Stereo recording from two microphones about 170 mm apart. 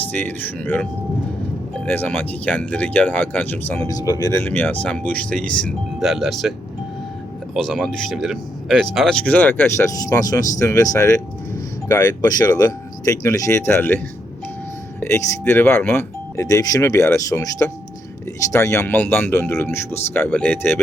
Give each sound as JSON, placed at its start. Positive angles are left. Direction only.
{"t": 0.1, "sound": "speech", "side_deg": 10}
{"t": 3.8, "sound": "speech", "side_deg": 20}
{"t": 7.5, "sound": "speech", "side_deg": 0}
{"t": 15.0, "sound": "speech", "side_deg": 15}